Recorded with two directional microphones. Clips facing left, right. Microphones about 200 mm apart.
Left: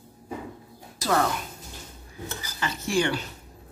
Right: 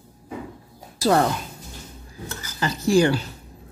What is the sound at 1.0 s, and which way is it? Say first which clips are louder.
Speech: right 6 dB; 35° right (ahead or behind).